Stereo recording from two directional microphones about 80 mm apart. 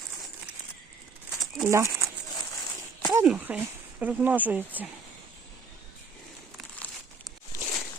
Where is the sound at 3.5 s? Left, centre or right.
Centre.